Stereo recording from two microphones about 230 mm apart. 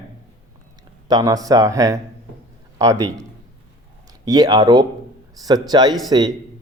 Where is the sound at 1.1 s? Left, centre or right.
Centre.